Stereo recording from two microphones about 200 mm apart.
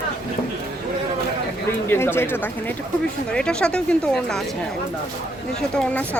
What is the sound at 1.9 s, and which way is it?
Speech, 10° left (ahead or behind).